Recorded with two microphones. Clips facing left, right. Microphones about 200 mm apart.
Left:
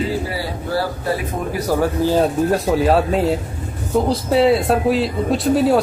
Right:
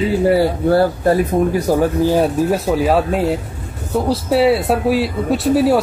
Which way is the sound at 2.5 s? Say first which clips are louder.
Even; centre (ahead or behind).